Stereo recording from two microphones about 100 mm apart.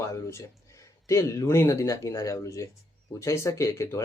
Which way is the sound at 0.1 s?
25° left (ahead or behind).